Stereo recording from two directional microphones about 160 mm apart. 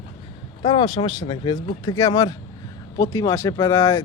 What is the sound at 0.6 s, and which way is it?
Speech, 35° left (ahead or behind).